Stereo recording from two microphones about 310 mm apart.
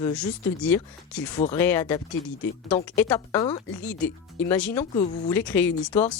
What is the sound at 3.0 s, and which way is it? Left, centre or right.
Speech, centre.